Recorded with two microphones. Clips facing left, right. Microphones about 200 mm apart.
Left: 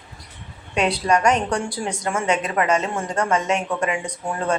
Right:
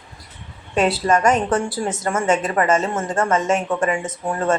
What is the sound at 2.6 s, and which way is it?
Speech, 45° right (ahead or behind).